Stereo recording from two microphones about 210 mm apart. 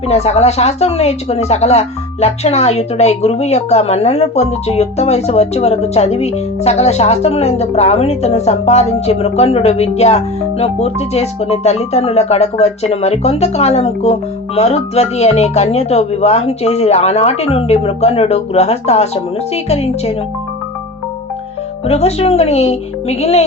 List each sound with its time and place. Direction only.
0.1 s a woman's voice: 30° left (ahead or behind)
21.8 s a woman's voice: 30° left (ahead or behind)